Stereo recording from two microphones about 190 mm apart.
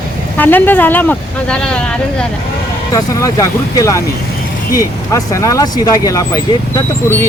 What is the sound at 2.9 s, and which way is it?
Speech, 15° left (ahead or behind).